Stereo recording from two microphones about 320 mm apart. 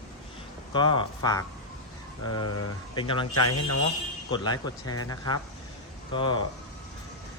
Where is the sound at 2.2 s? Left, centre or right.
Left.